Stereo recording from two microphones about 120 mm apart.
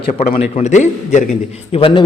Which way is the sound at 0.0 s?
65° left (ahead or behind).